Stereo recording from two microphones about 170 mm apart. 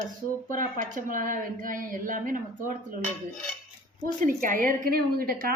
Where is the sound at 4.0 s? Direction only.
55° right (ahead or behind).